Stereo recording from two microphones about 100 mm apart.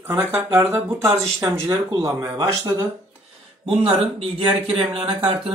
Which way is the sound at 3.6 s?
75° right (ahead or behind).